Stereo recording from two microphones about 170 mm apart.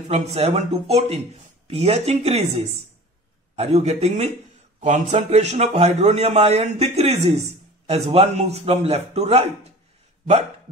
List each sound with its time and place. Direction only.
0.1 s a man's voice: 40° right (ahead or behind)